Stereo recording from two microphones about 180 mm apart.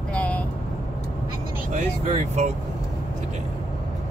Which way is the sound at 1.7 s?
40° right (ahead or behind).